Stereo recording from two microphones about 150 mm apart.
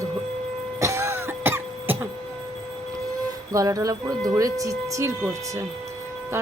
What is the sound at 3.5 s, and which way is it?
A woman's voice, 20° right (ahead or behind).